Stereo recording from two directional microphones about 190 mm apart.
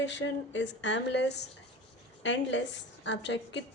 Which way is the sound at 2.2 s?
70° left (ahead or behind).